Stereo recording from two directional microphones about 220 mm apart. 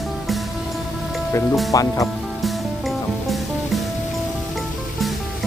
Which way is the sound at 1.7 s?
15° left (ahead or behind).